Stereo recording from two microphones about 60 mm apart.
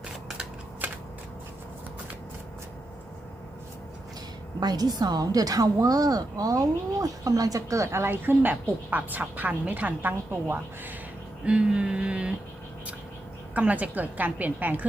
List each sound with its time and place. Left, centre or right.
4.6 s a woman's voice: right
8.1 s a woman's voice: right
11.4 s a sound: centre
13.5 s a woman's voice: right